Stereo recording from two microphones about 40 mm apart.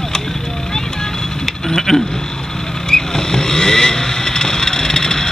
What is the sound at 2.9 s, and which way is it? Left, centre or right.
Vehicle, centre.